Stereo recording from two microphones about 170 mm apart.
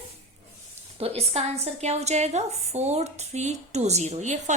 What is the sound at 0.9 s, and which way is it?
A woman's voice, 35° right (ahead or behind).